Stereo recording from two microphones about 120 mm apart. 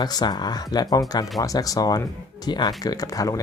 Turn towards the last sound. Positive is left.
turn(degrees=30)  # may be behind; listen again after turning